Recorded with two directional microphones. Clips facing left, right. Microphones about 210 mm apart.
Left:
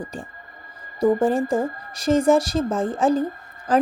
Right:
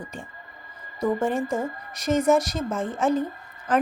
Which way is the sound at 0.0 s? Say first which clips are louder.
Left 5 dB; 35° left (ahead or behind).